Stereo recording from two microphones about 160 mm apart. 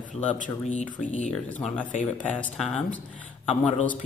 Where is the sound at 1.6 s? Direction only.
10° left (ahead or behind).